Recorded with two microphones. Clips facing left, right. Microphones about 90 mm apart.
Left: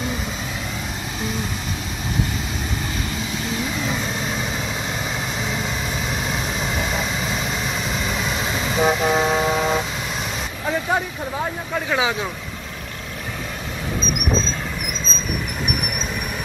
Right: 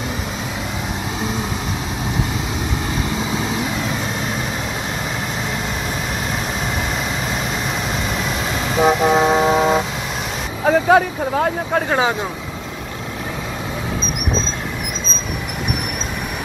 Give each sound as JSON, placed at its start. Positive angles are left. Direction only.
{"t": 8.7, "sound": "vehicle", "side_deg": -15}
{"t": 10.6, "sound": "vehicle", "side_deg": -65}
{"t": 11.9, "sound": "speech", "side_deg": -40}